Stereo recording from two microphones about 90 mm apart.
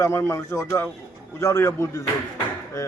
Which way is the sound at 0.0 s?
30° left (ahead or behind).